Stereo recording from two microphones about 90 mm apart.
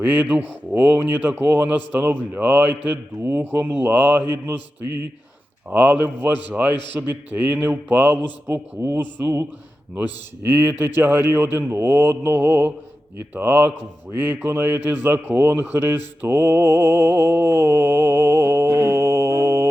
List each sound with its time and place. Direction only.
0.0 s a man's voice: 20° right (ahead or behind)
5.7 s a man's voice: 20° right (ahead or behind)
8.8 s a man's voice: 30° right (ahead or behind)
16.2 s mantra: 25° right (ahead or behind)